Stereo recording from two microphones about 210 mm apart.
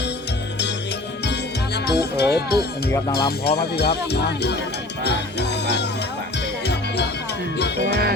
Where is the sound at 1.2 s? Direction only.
55° left (ahead or behind).